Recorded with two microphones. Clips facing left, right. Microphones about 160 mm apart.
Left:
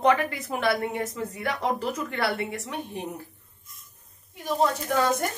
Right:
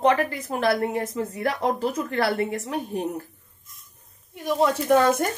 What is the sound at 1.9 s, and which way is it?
Speech, 30° right (ahead or behind).